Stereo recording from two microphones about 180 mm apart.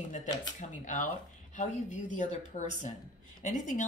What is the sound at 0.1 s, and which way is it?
Speech, 45° left (ahead or behind).